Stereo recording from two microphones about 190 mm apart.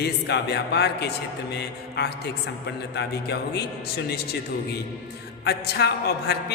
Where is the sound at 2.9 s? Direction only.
65° left (ahead or behind).